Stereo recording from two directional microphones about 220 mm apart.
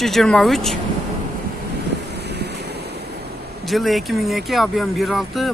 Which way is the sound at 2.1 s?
50° right (ahead or behind).